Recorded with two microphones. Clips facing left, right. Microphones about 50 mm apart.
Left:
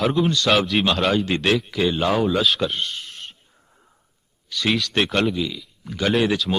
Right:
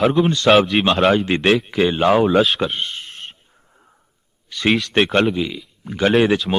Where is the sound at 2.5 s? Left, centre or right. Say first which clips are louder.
Right 2 dB; right.